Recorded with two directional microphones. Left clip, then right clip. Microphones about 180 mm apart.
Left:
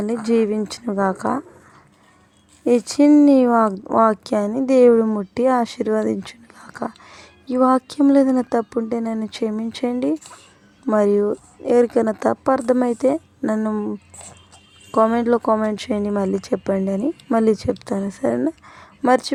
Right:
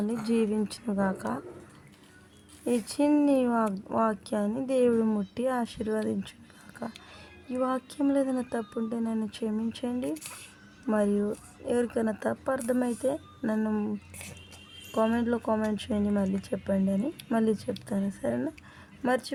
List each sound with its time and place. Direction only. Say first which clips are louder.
0.0 s speech: left 10 dB; 35° left (ahead or behind)
2.6 s speech: left 12 dB; 35° left (ahead or behind)
13.6 s speech: left 8 dB; 30° left (ahead or behind)
14.9 s speech: left 11 dB; 40° left (ahead or behind)